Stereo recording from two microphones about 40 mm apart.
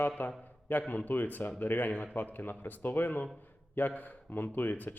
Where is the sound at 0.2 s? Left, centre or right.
Left.